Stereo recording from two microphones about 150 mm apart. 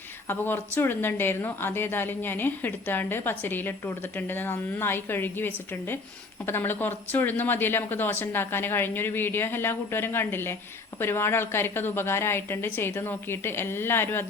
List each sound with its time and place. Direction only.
0.3 s a woman's voice: 15° left (ahead or behind)